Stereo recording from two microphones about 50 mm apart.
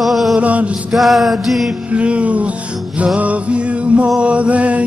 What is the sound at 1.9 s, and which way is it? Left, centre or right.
Music, right.